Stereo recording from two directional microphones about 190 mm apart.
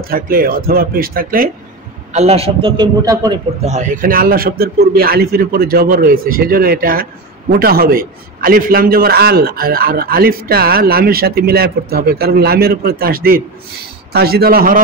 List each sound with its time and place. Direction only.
0.0 s a man's voice: 50° right (ahead or behind)
2.1 s a man's voice: 35° right (ahead or behind)
3.6 s a man's voice: 40° right (ahead or behind)